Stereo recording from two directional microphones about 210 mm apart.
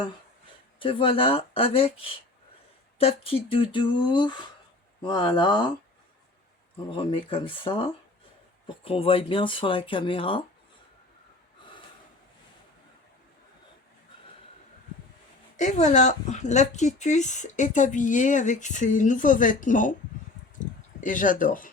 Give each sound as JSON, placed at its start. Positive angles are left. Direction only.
{"t": 0.8, "sound": "speech", "side_deg": 25}
{"t": 6.9, "sound": "speech", "side_deg": 25}
{"t": 15.5, "sound": "speech", "side_deg": 35}
{"t": 20.6, "sound": "a sound", "side_deg": 40}